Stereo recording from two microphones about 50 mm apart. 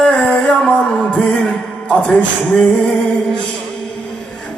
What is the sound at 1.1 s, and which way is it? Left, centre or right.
Music, left.